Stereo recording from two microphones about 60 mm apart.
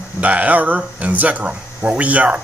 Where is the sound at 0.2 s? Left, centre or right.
Right.